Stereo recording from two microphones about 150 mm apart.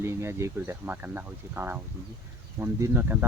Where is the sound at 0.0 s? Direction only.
15° right (ahead or behind).